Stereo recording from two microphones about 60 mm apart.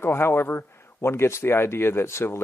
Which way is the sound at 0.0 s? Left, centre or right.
Left.